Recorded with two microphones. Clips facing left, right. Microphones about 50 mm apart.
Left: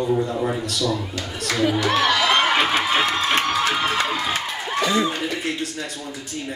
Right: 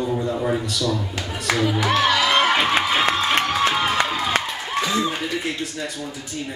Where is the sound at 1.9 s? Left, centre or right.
Centre.